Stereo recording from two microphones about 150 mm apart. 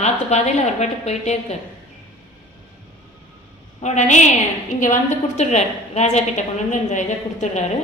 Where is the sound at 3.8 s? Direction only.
50° left (ahead or behind).